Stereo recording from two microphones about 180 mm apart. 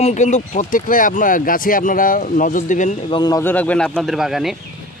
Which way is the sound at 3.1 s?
25° left (ahead or behind).